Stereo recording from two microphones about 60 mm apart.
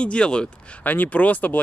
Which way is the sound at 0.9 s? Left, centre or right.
Left.